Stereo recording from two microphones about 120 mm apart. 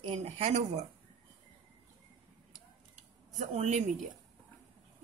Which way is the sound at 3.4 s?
75° right (ahead or behind).